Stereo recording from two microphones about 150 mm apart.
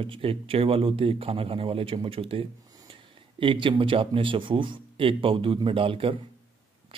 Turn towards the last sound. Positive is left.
turn(degrees=-35)  # may be behind; listen again after turning